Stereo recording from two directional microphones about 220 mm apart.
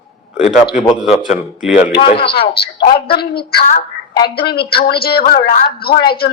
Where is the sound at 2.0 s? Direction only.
25° left (ahead or behind).